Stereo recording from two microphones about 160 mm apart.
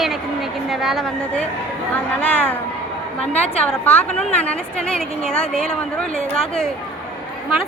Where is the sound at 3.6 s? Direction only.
10° left (ahead or behind).